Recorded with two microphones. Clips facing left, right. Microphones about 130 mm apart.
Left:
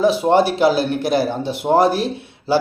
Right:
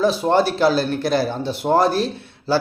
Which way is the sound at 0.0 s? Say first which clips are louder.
Left 2 dB; 15° left (ahead or behind).